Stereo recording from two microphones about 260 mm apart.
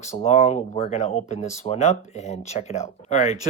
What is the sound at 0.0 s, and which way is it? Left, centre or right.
Speech, left.